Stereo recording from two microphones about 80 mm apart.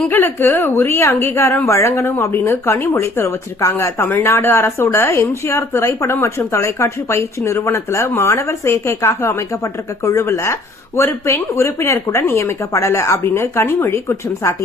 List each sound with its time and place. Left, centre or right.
0.1 s a woman's voice: left